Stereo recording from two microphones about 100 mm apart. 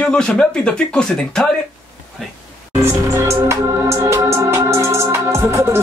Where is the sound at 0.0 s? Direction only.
10° left (ahead or behind).